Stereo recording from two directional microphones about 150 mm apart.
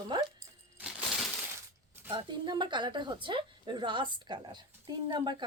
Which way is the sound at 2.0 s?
30° right (ahead or behind).